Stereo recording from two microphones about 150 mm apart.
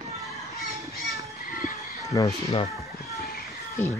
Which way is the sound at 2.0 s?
25° left (ahead or behind).